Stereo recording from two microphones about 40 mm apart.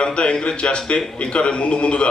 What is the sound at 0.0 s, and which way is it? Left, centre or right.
A man's voice, left.